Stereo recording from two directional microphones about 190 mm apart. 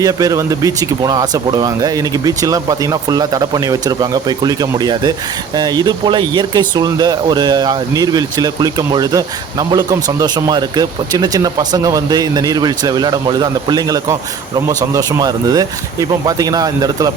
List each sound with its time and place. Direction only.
0.0 s speech: 20° right (ahead or behind)